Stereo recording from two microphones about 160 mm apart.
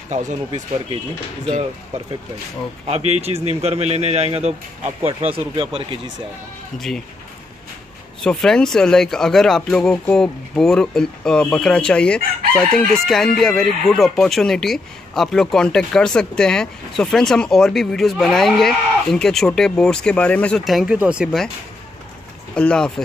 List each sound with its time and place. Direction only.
0.1 s speech: 45° right (ahead or behind)
2.9 s a man's voice: 40° right (ahead or behind)
8.2 s speech: 5° left (ahead or behind)
22.5 s speech: 5° left (ahead or behind)